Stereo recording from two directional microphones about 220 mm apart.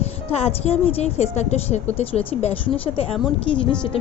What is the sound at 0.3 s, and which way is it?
A woman's voice, 30° left (ahead or behind).